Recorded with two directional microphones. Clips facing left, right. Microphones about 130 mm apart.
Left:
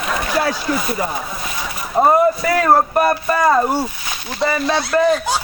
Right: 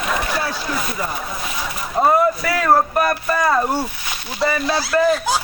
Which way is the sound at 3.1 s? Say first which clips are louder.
Left 3 dB; 25° left (ahead or behind).